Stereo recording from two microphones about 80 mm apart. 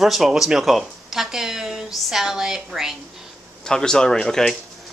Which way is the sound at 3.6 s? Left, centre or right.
Centre.